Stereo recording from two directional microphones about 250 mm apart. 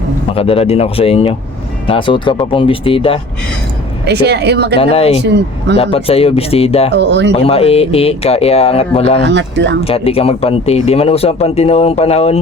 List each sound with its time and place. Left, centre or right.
0.3 s speech: left
4.0 s speech: right
4.8 s speech: left
6.9 s speech: right
7.3 s speech: left
9.2 s speech: right
9.8 s speech: left